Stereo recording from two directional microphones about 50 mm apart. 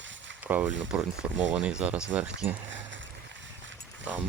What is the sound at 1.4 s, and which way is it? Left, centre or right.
Speech, centre.